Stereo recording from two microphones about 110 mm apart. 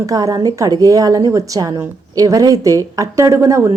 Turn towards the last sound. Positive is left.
turn(degrees=-25)  # may be behind; listen again after turning